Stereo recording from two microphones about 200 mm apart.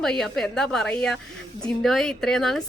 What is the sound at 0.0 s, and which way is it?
A woman's voice, 5° left (ahead or behind).